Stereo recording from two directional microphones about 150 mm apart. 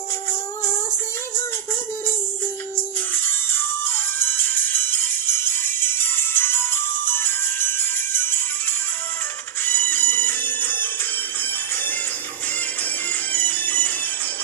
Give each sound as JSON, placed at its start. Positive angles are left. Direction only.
{"t": 3.2, "sound": "music", "side_deg": 15}
{"t": 9.6, "sound": "bagpipes", "side_deg": 15}
{"t": 12.8, "sound": "music", "side_deg": 10}